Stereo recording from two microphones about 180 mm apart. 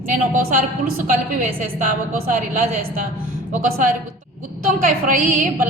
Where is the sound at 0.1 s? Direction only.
45° right (ahead or behind).